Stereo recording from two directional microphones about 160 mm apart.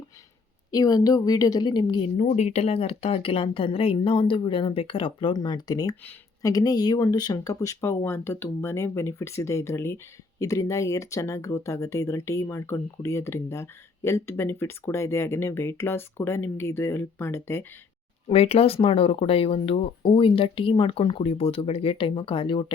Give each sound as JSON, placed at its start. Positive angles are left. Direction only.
{"t": 0.7, "sound": "speech", "side_deg": 25}
{"t": 2.1, "sound": "speech", "side_deg": 45}
{"t": 18.3, "sound": "speech", "side_deg": 40}